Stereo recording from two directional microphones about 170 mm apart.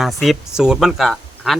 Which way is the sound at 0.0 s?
Centre (ahead or behind).